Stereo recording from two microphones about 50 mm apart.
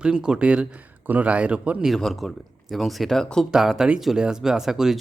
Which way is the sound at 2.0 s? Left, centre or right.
Centre.